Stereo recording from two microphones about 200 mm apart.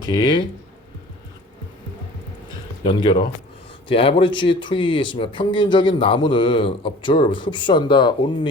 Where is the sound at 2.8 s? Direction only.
25° left (ahead or behind).